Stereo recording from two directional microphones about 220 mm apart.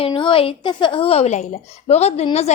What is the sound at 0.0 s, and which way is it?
A woman's voice, 20° left (ahead or behind).